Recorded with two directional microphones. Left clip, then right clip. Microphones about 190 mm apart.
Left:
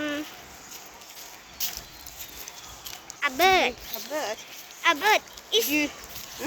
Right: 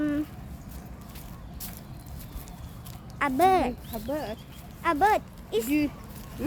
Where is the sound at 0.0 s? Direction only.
35° right (ahead or behind).